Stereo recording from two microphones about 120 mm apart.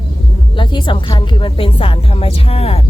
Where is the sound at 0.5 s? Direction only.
40° left (ahead or behind).